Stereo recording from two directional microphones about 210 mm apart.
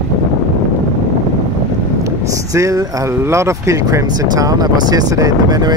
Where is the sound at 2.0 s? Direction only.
15° right (ahead or behind).